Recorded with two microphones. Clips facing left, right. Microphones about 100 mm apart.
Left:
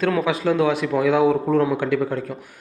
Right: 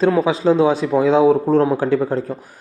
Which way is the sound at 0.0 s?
30° right (ahead or behind).